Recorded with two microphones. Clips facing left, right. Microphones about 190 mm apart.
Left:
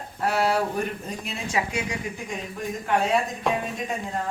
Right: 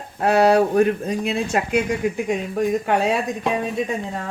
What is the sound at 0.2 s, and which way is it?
Speech, 70° right (ahead or behind).